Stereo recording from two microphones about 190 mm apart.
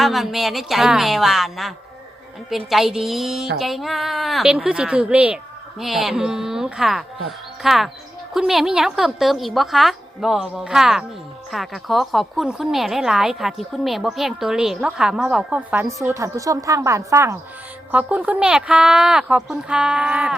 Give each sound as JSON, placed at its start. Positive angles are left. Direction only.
{"t": 0.0, "sound": "a woman's voice", "side_deg": 0}